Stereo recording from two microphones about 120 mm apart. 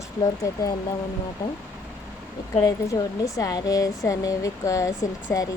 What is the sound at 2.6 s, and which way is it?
Speech, 30° left (ahead or behind).